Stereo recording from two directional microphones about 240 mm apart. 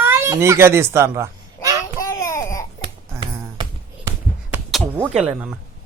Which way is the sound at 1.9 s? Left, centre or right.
Centre.